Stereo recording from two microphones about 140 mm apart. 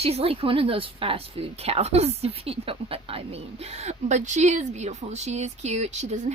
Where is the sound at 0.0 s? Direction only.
45° right (ahead or behind).